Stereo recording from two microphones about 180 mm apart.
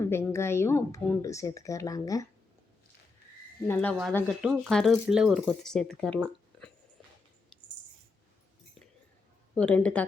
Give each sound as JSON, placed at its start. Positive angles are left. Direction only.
{"t": 0.0, "sound": "a woman's voice", "side_deg": 15}
{"t": 3.7, "sound": "a woman's voice", "side_deg": 10}
{"t": 9.6, "sound": "a woman's voice", "side_deg": 10}